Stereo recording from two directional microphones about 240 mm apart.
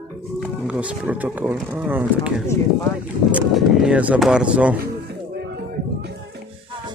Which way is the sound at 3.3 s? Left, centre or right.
Centre.